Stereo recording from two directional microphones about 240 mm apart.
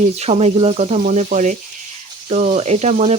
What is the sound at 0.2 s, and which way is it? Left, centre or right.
Speech, right.